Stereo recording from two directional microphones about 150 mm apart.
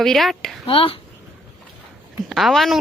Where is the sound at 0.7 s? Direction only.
35° left (ahead or behind).